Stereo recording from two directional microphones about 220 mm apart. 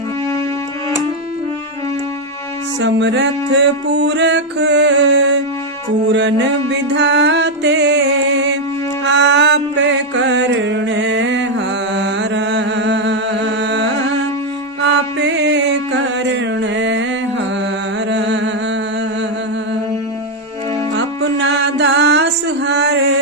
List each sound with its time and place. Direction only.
2.8 s music: 55° right (ahead or behind)
9.0 s mantra: 55° right (ahead or behind)
11.9 s music: 55° right (ahead or behind)
14.8 s mantra: 55° right (ahead or behind)
18.1 s music: 55° right (ahead or behind)
20.9 s music: 55° right (ahead or behind)